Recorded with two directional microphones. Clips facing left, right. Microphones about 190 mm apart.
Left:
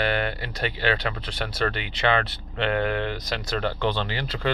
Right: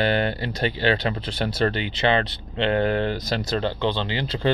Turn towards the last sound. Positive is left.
turn(degrees=-25)  # may be behind; listen again after turning